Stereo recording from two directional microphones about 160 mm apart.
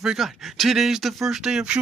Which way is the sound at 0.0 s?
Centre (ahead or behind).